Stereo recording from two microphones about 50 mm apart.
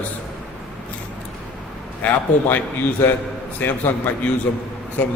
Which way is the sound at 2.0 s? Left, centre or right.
Left.